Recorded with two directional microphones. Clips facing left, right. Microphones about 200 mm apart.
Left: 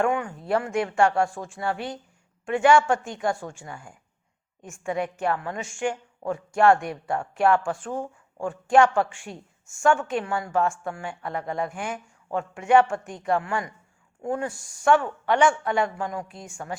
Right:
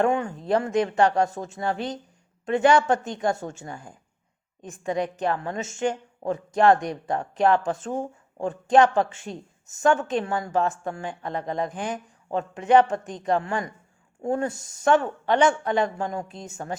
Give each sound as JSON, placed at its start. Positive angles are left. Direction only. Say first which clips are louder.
{"t": 0.0, "sound": "speech", "louder": "right 2 dB", "side_deg": -25}